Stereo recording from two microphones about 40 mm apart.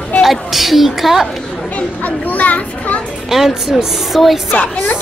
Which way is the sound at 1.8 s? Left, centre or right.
Left.